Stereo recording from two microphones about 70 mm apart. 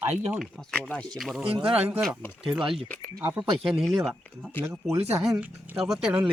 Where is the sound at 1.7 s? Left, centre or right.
Centre.